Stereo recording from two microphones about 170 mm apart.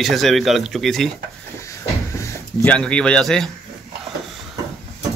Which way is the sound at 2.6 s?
5° left (ahead or behind).